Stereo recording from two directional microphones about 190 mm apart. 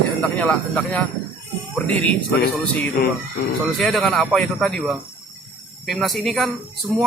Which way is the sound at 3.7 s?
Centre (ahead or behind).